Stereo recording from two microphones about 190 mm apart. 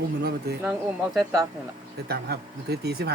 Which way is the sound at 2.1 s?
60° right (ahead or behind).